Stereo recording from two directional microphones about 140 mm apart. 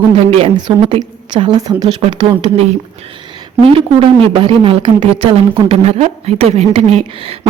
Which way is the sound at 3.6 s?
40° right (ahead or behind).